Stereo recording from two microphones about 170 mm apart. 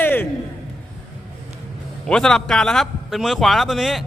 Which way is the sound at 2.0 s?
5° left (ahead or behind).